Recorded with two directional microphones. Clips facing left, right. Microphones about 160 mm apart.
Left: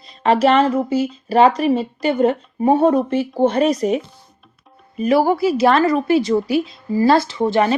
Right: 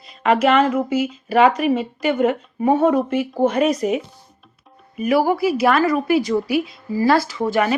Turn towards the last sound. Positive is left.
turn(degrees=25)  # may be behind; listen again after turning